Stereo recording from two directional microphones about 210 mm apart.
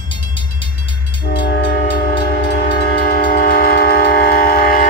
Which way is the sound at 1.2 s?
55° left (ahead or behind).